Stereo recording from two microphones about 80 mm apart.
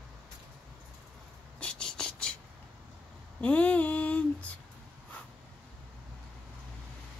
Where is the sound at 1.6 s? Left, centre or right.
Centre.